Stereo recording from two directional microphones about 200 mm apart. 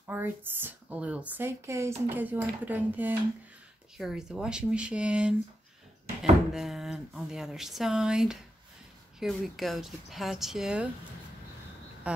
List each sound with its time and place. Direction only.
0.0 s speech: 10° right (ahead or behind)
6.5 s speech: centre (ahead or behind)